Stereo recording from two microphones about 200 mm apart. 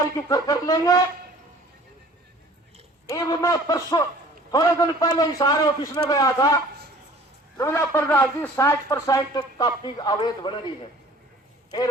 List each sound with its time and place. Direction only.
0.0 s a man's voice: 20° left (ahead or behind)
3.1 s a man's voice: 15° left (ahead or behind)